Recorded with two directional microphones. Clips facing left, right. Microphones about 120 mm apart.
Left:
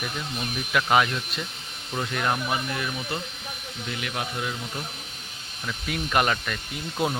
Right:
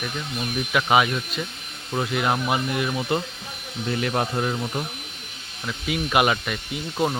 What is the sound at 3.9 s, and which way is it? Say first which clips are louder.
Speech: right 8 dB; 40° right (ahead or behind).